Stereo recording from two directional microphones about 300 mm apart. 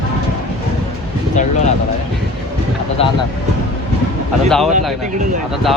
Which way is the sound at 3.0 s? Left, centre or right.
Centre.